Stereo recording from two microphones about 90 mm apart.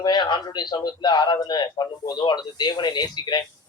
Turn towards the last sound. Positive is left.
turn(degrees=50)  # may be behind; listen again after turning